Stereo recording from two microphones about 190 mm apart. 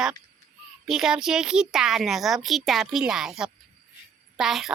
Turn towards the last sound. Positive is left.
turn(degrees=0)  # may be behind; listen again after turning